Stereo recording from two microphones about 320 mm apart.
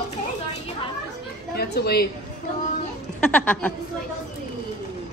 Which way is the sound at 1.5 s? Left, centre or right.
Left.